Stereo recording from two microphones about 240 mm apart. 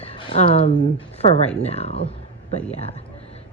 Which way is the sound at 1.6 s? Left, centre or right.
Left.